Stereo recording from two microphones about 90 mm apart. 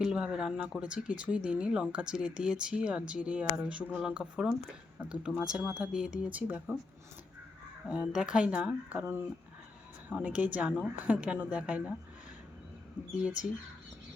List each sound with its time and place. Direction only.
0.0 s speech: 5° right (ahead or behind)
7.9 s speech: 10° right (ahead or behind)